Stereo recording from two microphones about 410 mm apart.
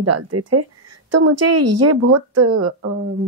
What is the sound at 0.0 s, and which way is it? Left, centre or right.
Speech, right.